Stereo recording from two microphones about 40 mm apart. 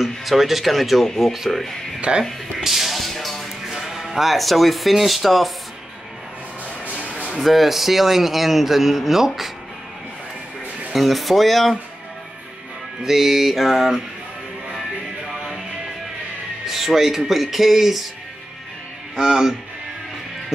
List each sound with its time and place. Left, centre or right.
0.0 s speech: centre
2.0 s speech: right
2.6 s music: centre
3.6 s speech: centre
7.3 s speech: centre
10.9 s speech: centre
13.0 s speech: centre
16.6 s speech: centre
19.1 s speech: centre